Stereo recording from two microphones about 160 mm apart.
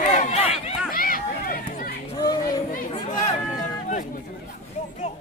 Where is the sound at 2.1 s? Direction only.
25° left (ahead or behind).